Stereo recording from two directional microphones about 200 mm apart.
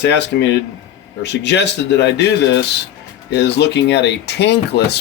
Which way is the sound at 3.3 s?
60° left (ahead or behind).